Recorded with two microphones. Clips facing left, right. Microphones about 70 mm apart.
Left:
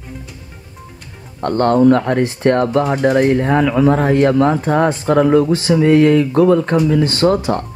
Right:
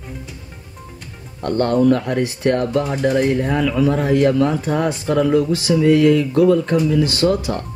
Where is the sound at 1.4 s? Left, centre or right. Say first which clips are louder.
Left 4 dB; left.